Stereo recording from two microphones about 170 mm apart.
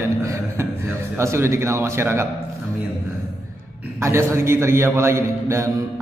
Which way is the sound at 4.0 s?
15° right (ahead or behind).